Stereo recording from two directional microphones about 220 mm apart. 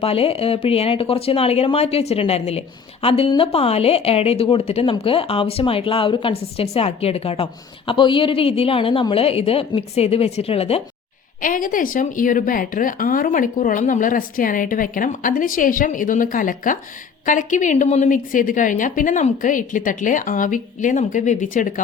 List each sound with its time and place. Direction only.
0.0 s speech: 25° left (ahead or behind)
11.3 s speech: 35° left (ahead or behind)